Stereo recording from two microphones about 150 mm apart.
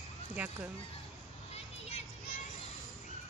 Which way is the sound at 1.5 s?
45° left (ahead or behind).